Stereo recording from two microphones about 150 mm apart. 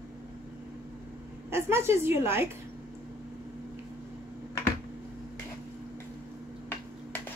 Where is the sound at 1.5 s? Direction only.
15° right (ahead or behind).